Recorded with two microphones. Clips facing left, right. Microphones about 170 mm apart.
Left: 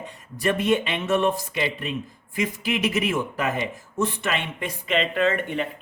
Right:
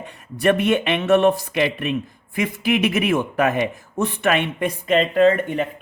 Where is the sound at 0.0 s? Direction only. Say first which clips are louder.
Right 6 dB; 65° right (ahead or behind).